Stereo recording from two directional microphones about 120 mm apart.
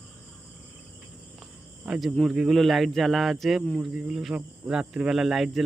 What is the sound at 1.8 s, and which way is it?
Speech, 5° right (ahead or behind).